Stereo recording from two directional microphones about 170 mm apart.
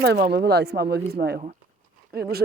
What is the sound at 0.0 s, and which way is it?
Speech, 75° right (ahead or behind).